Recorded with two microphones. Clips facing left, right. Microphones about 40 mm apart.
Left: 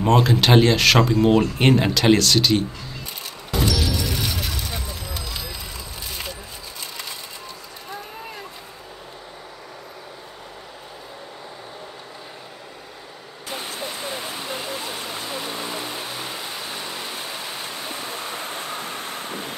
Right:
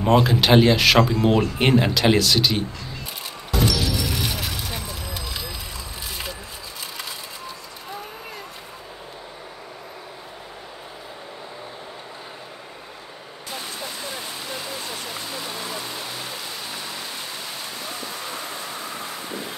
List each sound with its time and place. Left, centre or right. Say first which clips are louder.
0.0 s speech: even; centre
3.7 s music: even; centre
18.5 s vehicle: left 2 dB; left